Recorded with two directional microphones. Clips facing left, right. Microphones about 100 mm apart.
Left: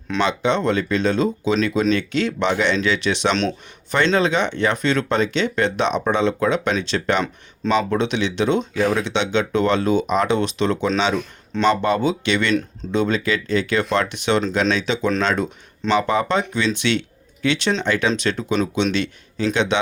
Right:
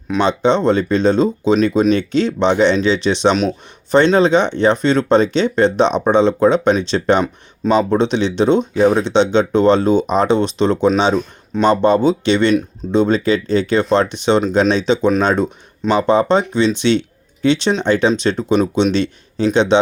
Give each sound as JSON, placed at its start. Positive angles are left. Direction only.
{"t": 0.3, "sound": "speech", "side_deg": -30}
{"t": 16.0, "sound": "speech", "side_deg": -30}